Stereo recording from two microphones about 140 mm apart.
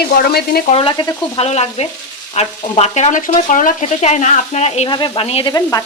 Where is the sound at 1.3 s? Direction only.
50° left (ahead or behind).